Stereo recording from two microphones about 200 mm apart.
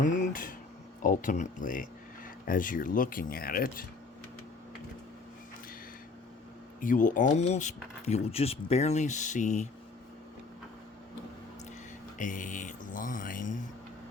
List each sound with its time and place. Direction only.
0.0 s a sound: 40° left (ahead or behind)
1.0 s speech: 40° left (ahead or behind)
6.8 s speech: 40° left (ahead or behind)
12.1 s speech: 40° left (ahead or behind)